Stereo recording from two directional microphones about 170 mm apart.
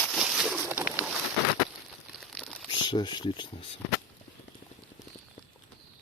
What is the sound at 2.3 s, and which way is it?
Crumpling, centre (ahead or behind).